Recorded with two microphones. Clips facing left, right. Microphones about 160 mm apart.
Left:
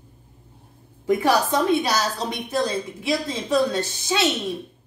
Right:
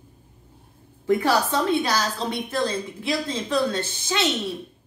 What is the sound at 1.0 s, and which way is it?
A woman's voice, 15° left (ahead or behind).